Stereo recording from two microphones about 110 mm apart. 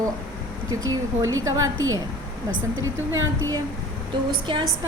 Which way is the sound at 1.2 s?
30° right (ahead or behind).